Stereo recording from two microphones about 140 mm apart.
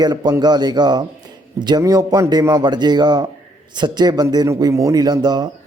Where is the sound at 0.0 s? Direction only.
30° right (ahead or behind).